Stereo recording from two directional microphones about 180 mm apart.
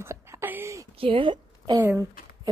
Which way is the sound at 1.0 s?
30° right (ahead or behind).